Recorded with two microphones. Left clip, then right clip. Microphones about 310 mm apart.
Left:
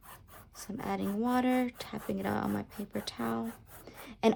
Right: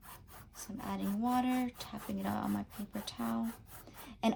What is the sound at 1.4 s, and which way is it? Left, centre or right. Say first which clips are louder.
A woman's voice: left 5 dB; left.